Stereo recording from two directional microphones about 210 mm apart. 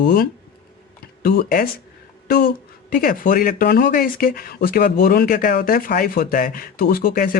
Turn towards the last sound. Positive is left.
turn(degrees=45)  # may be behind; listen again after turning